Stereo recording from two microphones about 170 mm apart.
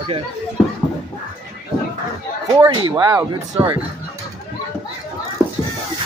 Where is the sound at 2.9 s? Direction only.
25° right (ahead or behind).